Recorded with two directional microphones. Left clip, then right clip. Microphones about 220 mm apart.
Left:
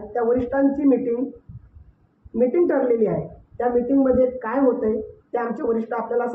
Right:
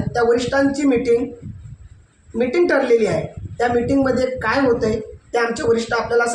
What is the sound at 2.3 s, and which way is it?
A woman's voice, 25° right (ahead or behind).